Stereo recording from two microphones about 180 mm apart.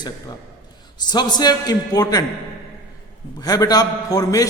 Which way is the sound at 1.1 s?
20° left (ahead or behind).